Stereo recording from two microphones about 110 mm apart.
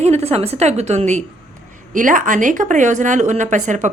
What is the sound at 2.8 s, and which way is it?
A woman's voice, 90° right.